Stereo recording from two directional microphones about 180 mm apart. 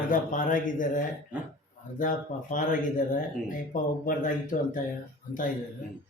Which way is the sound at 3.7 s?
50° left (ahead or behind).